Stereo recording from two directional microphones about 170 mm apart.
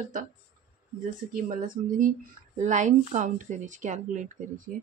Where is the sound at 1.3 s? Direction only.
55° right (ahead or behind).